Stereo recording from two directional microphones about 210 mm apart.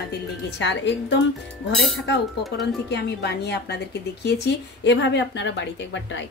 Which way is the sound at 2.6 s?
55° left (ahead or behind).